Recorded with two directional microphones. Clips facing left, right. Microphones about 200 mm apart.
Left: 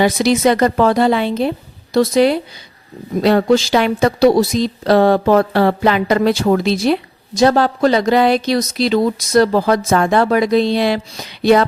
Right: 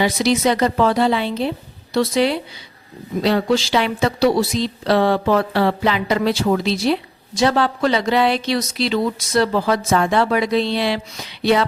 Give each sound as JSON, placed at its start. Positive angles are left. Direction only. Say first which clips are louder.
{"t": 0.0, "sound": "speech", "louder": "left 4 dB", "side_deg": 50}